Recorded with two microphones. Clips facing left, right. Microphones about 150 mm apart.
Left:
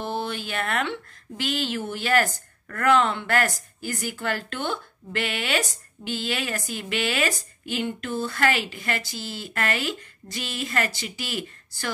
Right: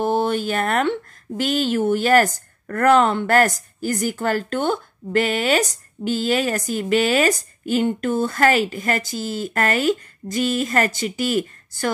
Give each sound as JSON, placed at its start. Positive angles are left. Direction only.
{"t": 0.0, "sound": "a woman's voice", "side_deg": -45}